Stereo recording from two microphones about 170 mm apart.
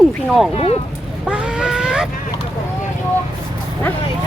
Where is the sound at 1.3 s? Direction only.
5° right (ahead or behind).